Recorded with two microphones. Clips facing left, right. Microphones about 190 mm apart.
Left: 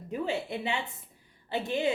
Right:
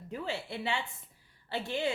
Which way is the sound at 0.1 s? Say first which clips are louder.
Left 5 dB; 20° left (ahead or behind).